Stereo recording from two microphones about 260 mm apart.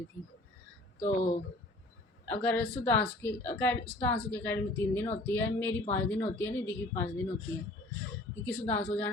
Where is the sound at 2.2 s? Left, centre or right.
Centre.